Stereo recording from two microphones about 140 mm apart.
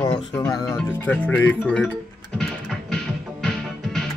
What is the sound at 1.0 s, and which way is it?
Speech, 10° left (ahead or behind).